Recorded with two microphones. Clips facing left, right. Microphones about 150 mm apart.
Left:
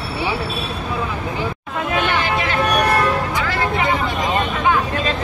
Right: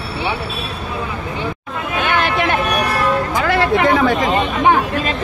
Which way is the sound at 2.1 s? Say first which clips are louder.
Right 3 dB; 55° right (ahead or behind).